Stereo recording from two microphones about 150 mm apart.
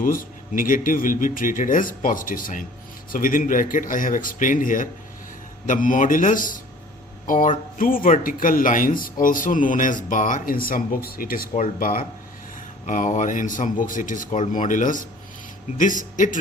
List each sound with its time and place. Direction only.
0.0 s speech: 70° left (ahead or behind)
12.8 s speech: 55° left (ahead or behind)